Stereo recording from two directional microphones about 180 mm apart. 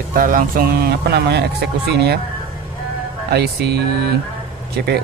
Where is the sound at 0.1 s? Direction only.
50° right (ahead or behind).